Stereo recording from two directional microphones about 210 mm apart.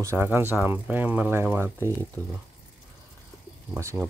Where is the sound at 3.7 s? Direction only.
15° right (ahead or behind).